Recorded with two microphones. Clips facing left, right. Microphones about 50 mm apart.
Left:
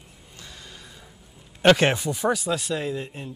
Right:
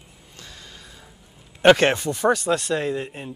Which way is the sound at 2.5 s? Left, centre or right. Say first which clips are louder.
Right 4 dB; centre.